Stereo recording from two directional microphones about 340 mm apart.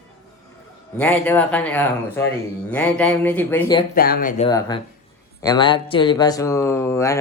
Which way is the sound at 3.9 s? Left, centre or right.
Left.